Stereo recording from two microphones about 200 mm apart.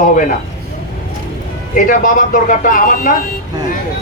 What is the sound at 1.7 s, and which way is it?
A man's voice, 45° left (ahead or behind).